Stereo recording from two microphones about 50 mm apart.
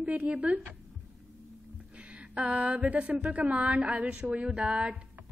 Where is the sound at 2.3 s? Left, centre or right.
Right.